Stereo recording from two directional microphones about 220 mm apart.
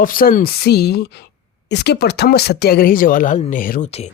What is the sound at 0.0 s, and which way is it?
Speech, 40° left (ahead or behind).